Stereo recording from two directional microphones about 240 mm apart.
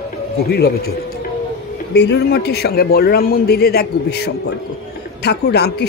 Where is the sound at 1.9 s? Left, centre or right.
Left.